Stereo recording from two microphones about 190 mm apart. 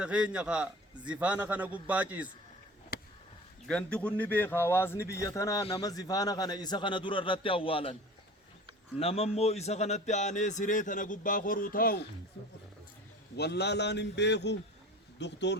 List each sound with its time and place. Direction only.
0.0 s a man's voice: 5° right (ahead or behind)
2.9 s a sound: 55° left (ahead or behind)
3.7 s a man's voice: 5° left (ahead or behind); by 7.9 s 30° left (ahead or behind)
9.0 s a man's voice: 30° left (ahead or behind); by 12.0 s 50° left (ahead or behind)
13.3 s a man's voice: 60° left (ahead or behind)